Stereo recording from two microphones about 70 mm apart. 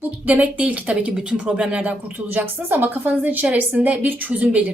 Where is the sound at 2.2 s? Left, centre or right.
Right.